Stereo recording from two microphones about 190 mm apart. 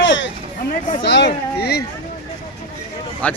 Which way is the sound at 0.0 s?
75° left (ahead or behind).